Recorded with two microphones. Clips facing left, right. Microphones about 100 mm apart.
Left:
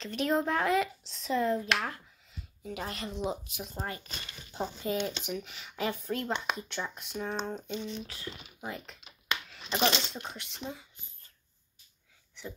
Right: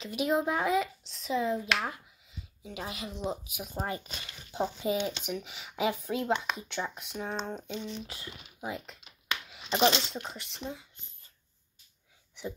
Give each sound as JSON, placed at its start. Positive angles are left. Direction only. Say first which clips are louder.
{"t": 0.0, "sound": "speech", "louder": "right 1 dB", "side_deg": -5}
{"t": 7.9, "sound": "speech", "louder": "left 1 dB", "side_deg": -15}
{"t": 8.6, "sound": "a sound", "louder": "right 2 dB", "side_deg": -5}
{"t": 10.0, "sound": "speech", "louder": "right 1 dB", "side_deg": -5}